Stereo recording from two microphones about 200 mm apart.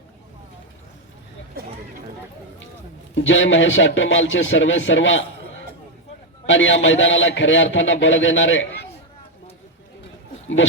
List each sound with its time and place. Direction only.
3.2 s a man's voice: 70° left (ahead or behind)
6.4 s a man's voice: 70° left (ahead or behind)